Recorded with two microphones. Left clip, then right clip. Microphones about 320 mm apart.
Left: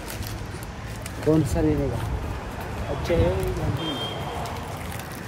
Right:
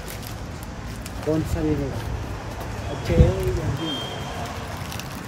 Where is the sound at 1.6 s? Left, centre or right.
Centre.